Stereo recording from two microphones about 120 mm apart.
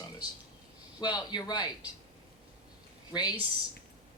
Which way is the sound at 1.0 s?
35° left (ahead or behind).